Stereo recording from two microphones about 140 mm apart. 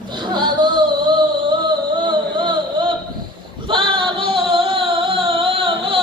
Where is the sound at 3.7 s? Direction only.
35° right (ahead or behind).